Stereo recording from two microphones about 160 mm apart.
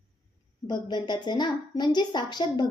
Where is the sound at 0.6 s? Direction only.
25° left (ahead or behind).